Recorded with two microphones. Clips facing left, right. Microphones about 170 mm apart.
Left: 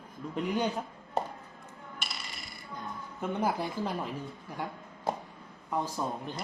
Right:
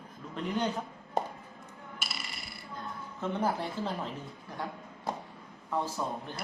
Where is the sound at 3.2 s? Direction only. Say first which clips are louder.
Left 1 dB; 10° left (ahead or behind).